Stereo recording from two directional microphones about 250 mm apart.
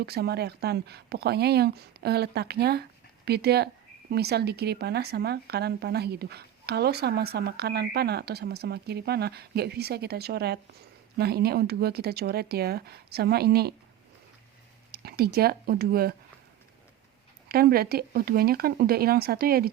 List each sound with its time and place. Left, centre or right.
0.0 s speech: right
14.9 s speech: right
17.5 s speech: right